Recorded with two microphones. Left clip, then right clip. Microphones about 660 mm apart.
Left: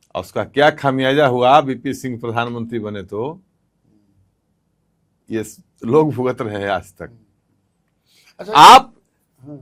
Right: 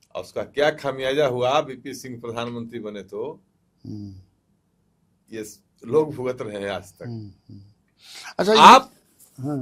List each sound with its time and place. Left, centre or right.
0.0 s speech: left
5.2 s speech: left
8.2 s a sound: right